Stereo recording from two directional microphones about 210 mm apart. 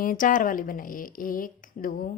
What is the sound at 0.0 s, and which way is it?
A woman's voice, 40° left (ahead or behind).